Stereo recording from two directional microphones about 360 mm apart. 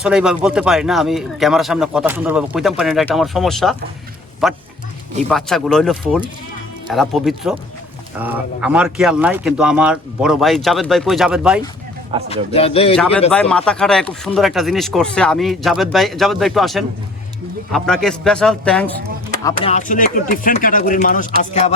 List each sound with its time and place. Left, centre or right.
0.0 s speech: centre
12.3 s speech: centre
13.3 s speech: centre
19.5 s speech: centre